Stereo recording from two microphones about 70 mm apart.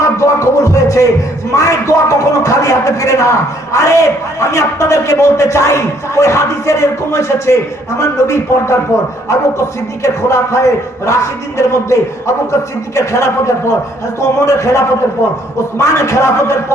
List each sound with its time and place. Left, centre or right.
0.0 s speech: left